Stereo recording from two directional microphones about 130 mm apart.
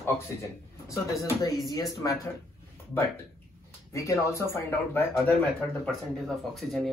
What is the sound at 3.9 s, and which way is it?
Speech, 25° left (ahead or behind).